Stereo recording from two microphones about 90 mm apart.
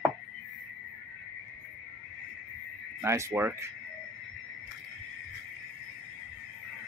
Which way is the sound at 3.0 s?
30° right (ahead or behind).